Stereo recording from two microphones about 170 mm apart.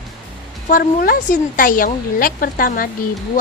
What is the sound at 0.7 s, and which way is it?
Speech, 55° left (ahead or behind).